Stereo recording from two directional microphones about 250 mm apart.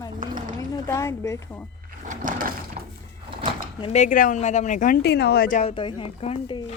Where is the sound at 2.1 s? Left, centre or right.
Right.